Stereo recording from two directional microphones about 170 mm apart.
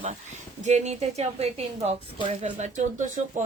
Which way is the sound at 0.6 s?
45° right (ahead or behind).